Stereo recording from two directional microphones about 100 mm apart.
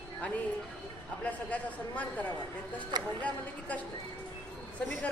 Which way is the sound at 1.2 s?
15° left (ahead or behind).